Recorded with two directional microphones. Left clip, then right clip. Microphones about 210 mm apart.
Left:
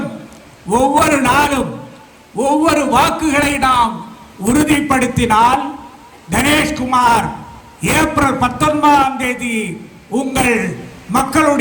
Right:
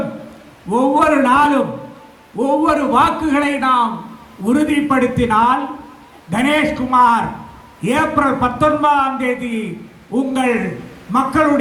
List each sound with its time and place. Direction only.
0.7 s a man's voice: 55° left (ahead or behind)